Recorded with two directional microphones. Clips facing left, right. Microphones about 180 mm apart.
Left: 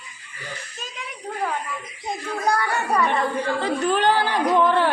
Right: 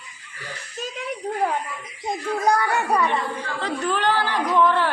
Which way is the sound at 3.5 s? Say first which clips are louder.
Left 1 dB; 15° left (ahead or behind).